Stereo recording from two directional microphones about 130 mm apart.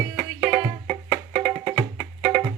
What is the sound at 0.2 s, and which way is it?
Music, 25° right (ahead or behind).